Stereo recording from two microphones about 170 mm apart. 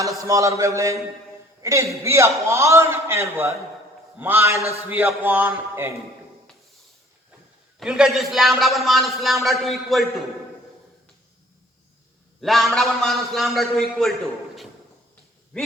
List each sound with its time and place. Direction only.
0.2 s a man's voice: 20° right (ahead or behind)
7.8 s a man's voice: centre (ahead or behind)
12.4 s a man's voice: centre (ahead or behind)